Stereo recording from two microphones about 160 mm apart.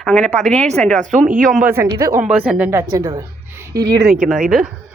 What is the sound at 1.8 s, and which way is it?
Speech, 20° right (ahead or behind).